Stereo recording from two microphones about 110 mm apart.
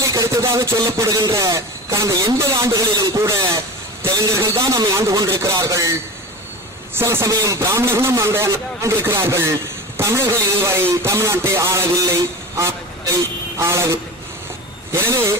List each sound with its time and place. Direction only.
0.0 s a man's voice: 30° right (ahead or behind)
13.6 s a man's voice: 25° right (ahead or behind)